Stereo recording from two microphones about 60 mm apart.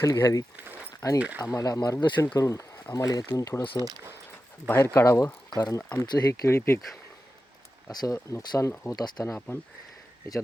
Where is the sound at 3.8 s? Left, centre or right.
Left.